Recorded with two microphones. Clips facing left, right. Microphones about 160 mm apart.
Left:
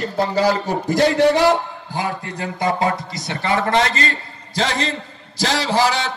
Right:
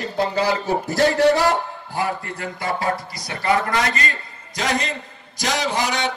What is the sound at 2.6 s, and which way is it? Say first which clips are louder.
A man's voice: left 4 dB; 20° left (ahead or behind).